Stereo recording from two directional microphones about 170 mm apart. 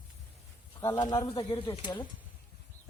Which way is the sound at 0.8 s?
25° left (ahead or behind).